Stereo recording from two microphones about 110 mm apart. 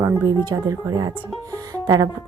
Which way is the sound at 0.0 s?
30° right (ahead or behind).